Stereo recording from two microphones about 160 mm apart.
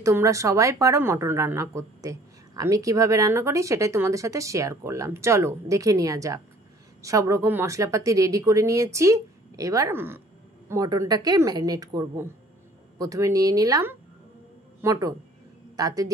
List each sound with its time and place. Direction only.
0.0 s a woman's voice: 20° right (ahead or behind)